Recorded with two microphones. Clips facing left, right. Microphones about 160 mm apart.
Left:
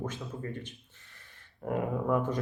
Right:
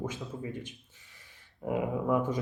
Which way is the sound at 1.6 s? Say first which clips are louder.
Right 1 dB; 5° right (ahead or behind).